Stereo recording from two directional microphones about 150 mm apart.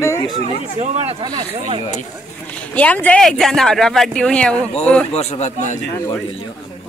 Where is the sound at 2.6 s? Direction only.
10° left (ahead or behind).